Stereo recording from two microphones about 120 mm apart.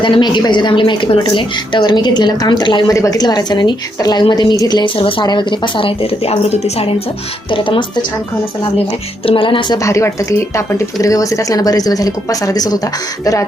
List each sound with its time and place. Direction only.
0.0 s a woman's voice: 40° left (ahead or behind)
4.9 s a woman's voice: 45° left (ahead or behind)
7.5 s a woman's voice: 45° left (ahead or behind)
9.2 s a woman's voice: 45° left (ahead or behind)
9.7 s a woman's voice: 25° left (ahead or behind)